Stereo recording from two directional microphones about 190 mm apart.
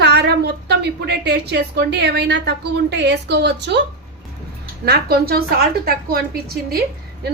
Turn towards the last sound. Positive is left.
turn(degrees=-50)  # may be behind; listen again after turning